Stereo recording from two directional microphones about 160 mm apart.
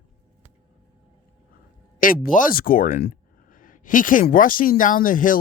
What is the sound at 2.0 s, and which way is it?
Speech, 60° left (ahead or behind).